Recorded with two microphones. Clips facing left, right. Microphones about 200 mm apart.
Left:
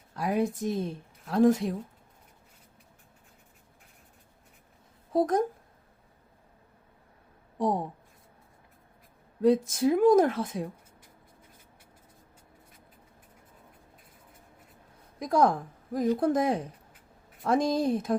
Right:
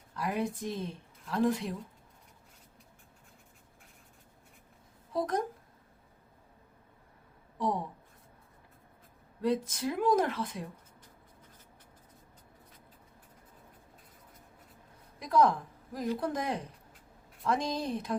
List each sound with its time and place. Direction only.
0.2 s a woman's voice: 45° left (ahead or behind)
5.1 s a woman's voice: 45° left (ahead or behind)
9.4 s a woman's voice: 45° left (ahead or behind)
15.2 s a woman's voice: 45° left (ahead or behind)